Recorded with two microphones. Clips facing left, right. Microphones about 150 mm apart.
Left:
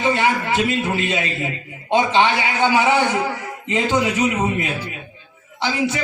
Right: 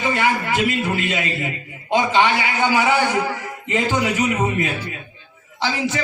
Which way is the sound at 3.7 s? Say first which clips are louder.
Left 1 dB; 20° left (ahead or behind).